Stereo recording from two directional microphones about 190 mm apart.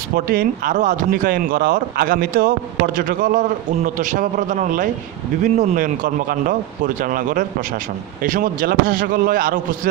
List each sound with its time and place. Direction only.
0.1 s speech: 50° right (ahead or behind)